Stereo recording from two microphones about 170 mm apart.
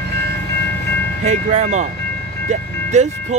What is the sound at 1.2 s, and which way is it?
Speech, 45° right (ahead or behind).